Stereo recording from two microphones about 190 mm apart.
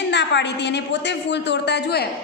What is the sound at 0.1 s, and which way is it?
A woman's voice, 65° left (ahead or behind).